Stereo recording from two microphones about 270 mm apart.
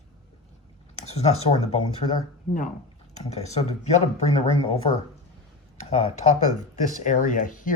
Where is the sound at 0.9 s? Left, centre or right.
Left.